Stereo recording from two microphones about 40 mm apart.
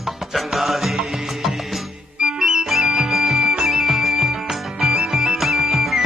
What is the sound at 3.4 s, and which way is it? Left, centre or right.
Music, centre.